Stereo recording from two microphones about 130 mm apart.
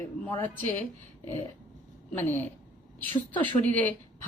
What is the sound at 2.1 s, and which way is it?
Speech, 15° left (ahead or behind).